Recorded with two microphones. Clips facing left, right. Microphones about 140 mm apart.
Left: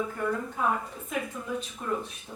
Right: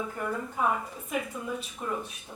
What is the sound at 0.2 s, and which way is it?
Speech, 10° right (ahead or behind).